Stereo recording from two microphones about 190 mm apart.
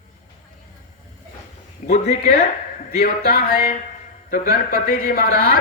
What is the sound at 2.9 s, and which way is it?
Speech, 50° left (ahead or behind).